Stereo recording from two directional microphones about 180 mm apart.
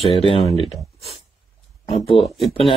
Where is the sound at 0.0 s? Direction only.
30° left (ahead or behind).